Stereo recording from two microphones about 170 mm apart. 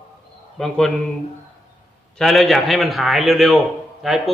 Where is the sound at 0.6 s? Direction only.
5° left (ahead or behind).